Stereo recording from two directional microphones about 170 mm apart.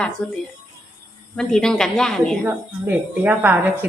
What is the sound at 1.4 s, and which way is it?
A woman's voice, 5° left (ahead or behind).